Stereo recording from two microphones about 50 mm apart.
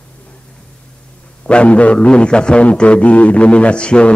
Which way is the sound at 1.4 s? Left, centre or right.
Left.